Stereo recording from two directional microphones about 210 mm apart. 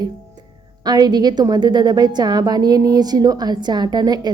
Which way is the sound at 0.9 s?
20° right (ahead or behind).